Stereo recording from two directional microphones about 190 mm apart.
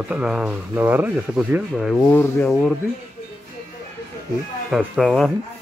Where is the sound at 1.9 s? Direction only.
5° left (ahead or behind).